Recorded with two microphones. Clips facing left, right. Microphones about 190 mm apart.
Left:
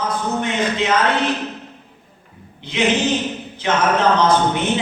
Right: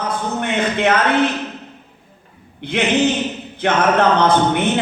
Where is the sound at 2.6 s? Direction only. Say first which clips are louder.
Right 2 dB; 60° right (ahead or behind).